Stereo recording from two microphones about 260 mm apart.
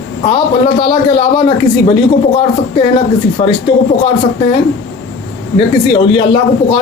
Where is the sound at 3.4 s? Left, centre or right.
Left.